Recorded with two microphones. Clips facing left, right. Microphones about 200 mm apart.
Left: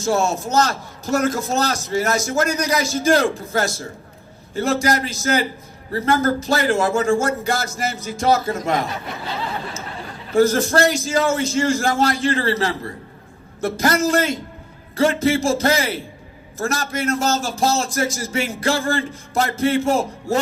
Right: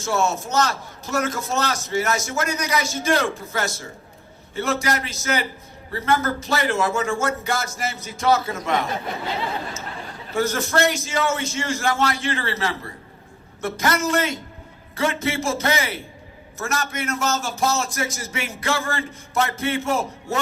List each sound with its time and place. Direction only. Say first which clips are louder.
0.0 s a man's voice: left 3 dB; 35° left (ahead or behind)
10.3 s a man's voice: left 6 dB; 30° left (ahead or behind)